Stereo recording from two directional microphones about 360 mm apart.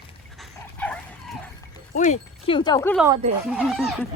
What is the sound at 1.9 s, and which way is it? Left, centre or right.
A woman's voice, centre.